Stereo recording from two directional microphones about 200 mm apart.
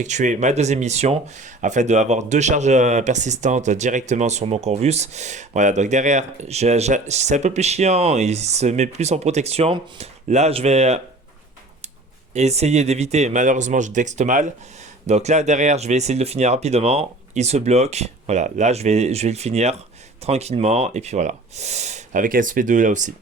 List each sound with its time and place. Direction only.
0.0 s speech: 35° right (ahead or behind)
12.3 s speech: 35° right (ahead or behind)